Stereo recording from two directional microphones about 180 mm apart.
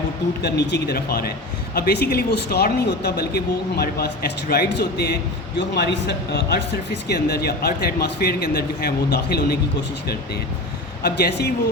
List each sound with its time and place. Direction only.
0.4 s speech: 65° left (ahead or behind)
11.0 s speech: 65° left (ahead or behind)